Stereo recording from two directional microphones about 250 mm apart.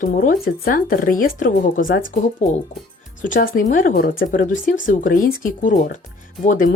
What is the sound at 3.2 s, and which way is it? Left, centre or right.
Speech, left.